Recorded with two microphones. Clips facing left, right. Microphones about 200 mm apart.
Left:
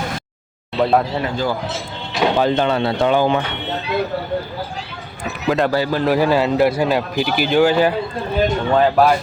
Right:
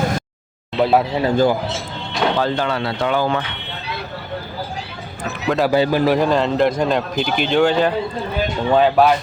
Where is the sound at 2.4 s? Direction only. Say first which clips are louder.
Left 3 dB; 20° left (ahead or behind).